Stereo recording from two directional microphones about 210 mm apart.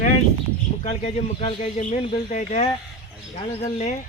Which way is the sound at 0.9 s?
30° left (ahead or behind).